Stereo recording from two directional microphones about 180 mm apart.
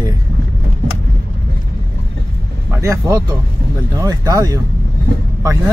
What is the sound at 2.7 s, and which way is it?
Speech, 15° right (ahead or behind).